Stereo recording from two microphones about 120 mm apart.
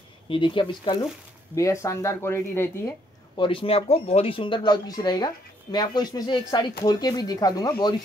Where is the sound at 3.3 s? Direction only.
45° left (ahead or behind).